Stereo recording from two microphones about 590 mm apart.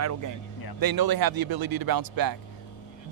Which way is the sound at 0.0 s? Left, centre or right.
Right.